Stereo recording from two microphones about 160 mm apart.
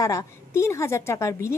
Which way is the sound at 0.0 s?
20° left (ahead or behind).